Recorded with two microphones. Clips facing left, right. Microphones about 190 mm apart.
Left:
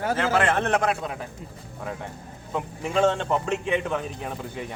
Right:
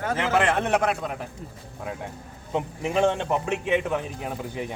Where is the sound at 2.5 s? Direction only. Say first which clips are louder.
Right 1 dB; 20° right (ahead or behind).